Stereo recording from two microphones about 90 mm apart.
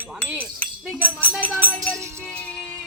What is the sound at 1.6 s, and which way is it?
Music, 20° left (ahead or behind).